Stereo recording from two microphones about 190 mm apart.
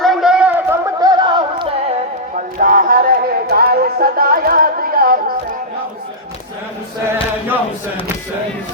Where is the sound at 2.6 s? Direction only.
45° right (ahead or behind).